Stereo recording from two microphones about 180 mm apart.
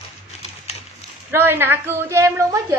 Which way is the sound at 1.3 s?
10° right (ahead or behind).